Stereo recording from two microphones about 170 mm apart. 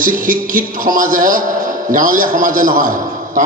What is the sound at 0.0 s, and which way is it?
A man's voice, 55° right (ahead or behind).